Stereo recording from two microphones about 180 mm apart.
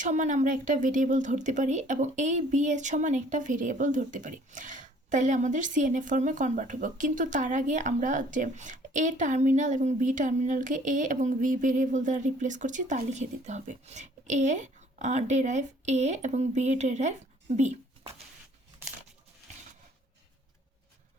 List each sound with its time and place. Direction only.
0.0 s a woman's voice: 45° right (ahead or behind)